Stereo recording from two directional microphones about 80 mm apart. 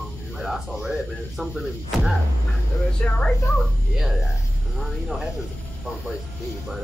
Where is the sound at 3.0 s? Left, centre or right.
Centre.